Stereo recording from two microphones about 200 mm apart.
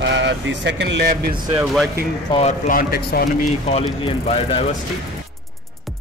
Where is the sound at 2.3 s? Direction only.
30° left (ahead or behind).